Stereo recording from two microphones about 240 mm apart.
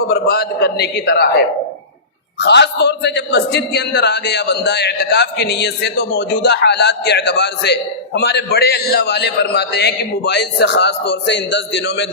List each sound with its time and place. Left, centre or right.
0.1 s a man's voice: left